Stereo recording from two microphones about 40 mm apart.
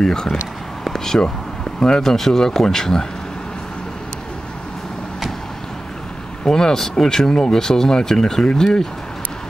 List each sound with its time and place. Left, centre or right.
0.0 s speech: centre
0.8 s a sound: centre
1.2 s speech: centre
2.0 s speech: centre
6.4 s speech: centre